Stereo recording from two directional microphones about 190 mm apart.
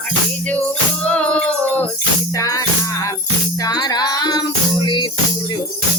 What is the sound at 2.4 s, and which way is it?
Music, 20° left (ahead or behind).